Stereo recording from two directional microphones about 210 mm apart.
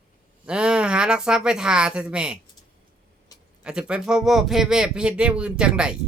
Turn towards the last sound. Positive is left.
turn(degrees=-5)  # may be behind; listen again after turning